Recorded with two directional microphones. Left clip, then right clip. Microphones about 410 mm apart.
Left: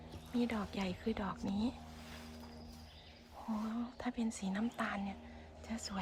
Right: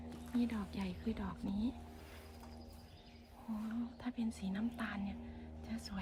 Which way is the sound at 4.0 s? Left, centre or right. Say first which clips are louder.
Left 3 dB; centre.